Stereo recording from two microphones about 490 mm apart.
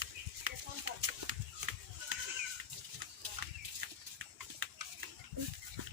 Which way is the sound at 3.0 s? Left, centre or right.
Right.